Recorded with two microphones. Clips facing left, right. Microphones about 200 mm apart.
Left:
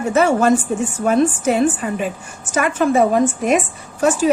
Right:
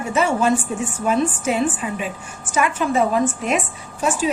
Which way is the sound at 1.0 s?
45° left (ahead or behind).